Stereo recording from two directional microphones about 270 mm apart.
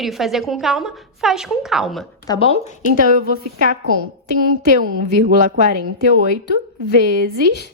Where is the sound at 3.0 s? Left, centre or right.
Right.